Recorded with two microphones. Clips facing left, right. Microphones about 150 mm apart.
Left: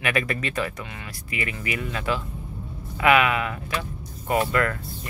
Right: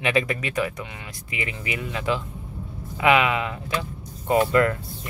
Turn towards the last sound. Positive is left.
turn(degrees=-20)  # may be behind; listen again after turning